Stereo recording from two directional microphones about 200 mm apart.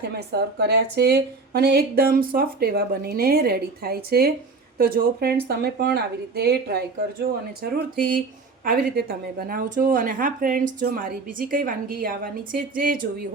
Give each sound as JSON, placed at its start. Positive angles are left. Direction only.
{"t": 0.1, "sound": "speech", "side_deg": -55}